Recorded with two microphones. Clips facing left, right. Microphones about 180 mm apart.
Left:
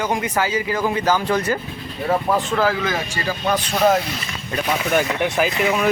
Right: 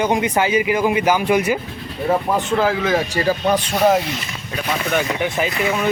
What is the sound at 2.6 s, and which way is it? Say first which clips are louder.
Speech: right 2 dB; 25° right (ahead or behind).